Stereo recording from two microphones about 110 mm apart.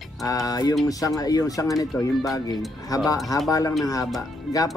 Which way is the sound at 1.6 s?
Centre (ahead or behind).